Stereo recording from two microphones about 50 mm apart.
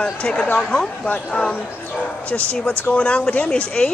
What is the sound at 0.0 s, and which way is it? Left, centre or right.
Speech, centre.